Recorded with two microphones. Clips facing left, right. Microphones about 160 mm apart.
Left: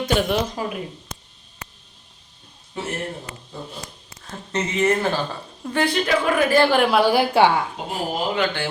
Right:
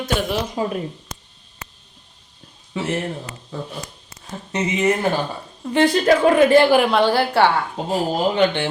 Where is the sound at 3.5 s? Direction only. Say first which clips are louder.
Right 5 dB; 90° right.